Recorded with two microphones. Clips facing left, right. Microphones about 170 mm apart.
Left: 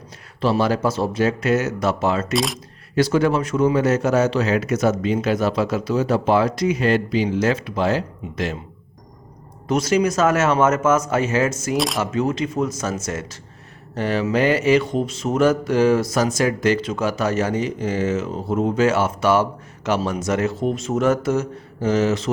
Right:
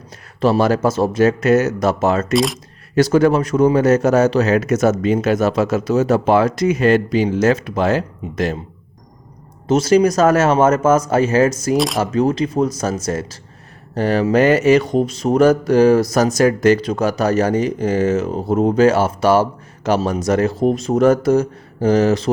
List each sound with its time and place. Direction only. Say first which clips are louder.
0.4 s a man's voice: right 4 dB; 45° right (ahead or behind)
2.3 s speech: right 5 dB; centre (ahead or behind)
2.9 s a man's voice: right 5 dB; 45° right (ahead or behind)
9.6 s mantra: right 5 dB; 30° right (ahead or behind)